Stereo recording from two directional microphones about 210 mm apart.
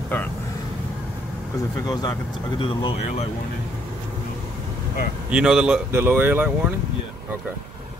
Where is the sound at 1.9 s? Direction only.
20° left (ahead or behind).